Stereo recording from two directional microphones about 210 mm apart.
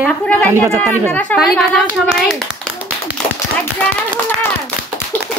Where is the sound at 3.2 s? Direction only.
5° left (ahead or behind).